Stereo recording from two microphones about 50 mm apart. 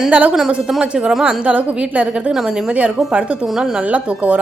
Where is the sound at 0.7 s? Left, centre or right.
Centre.